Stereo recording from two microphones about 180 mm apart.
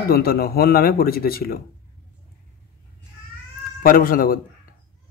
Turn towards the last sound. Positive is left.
turn(degrees=50)  # may be behind; listen again after turning